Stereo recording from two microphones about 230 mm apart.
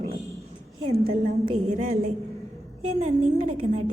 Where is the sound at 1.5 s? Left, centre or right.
Right.